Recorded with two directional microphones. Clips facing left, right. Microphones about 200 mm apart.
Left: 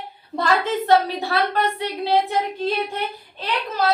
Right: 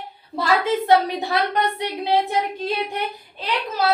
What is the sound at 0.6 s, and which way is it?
A woman's voice, 15° right (ahead or behind).